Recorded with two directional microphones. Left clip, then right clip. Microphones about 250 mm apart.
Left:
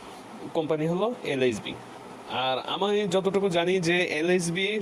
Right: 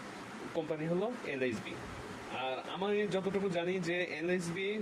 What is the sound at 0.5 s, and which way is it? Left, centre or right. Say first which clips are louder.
A man's voice: left 9 dB; left.